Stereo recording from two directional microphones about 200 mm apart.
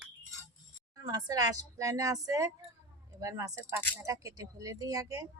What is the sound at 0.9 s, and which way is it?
Speech, 20° right (ahead or behind).